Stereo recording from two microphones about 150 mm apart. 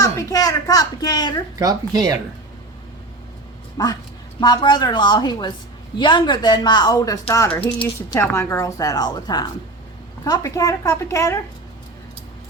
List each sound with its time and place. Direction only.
0.0 s speech: 20° left (ahead or behind)
1.5 s speech: 25° right (ahead or behind)
3.8 s speech: 25° left (ahead or behind)